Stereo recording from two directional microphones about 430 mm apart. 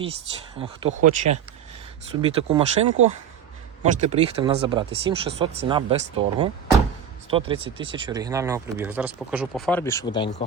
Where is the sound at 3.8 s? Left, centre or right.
Centre.